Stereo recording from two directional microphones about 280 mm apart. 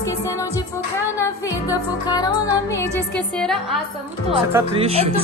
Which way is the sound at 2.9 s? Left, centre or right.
Centre.